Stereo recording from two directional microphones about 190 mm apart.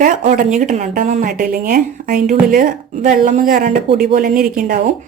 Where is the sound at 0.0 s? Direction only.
40° right (ahead or behind).